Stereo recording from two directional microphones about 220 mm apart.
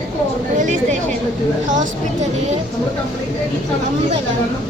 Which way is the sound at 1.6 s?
35° right (ahead or behind).